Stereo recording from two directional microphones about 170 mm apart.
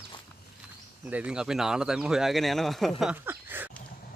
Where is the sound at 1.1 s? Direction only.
5° right (ahead or behind).